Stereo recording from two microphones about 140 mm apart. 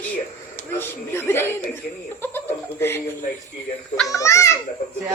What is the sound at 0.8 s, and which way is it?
Chuckle, 15° left (ahead or behind).